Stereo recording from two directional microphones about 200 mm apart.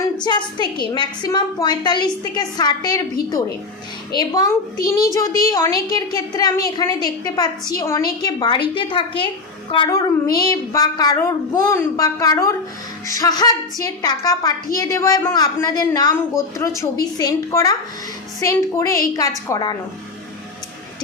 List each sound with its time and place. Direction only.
0.2 s a woman's voice: 20° left (ahead or behind)
4.1 s a woman's voice: 20° left (ahead or behind)